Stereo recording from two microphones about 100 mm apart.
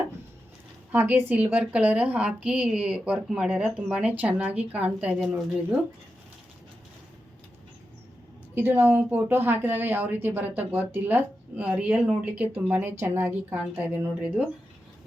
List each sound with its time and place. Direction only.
0.9 s a woman's voice: 15° right (ahead or behind)
8.5 s a woman's voice: 20° right (ahead or behind)